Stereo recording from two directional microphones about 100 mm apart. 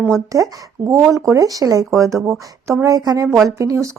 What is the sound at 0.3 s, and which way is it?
A woman's voice, 35° right (ahead or behind).